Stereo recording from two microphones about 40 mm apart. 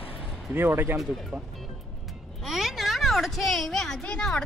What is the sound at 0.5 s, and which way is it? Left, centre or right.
Speech, right.